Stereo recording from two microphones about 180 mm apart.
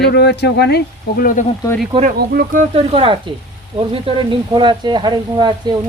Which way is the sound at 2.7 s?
30° right (ahead or behind).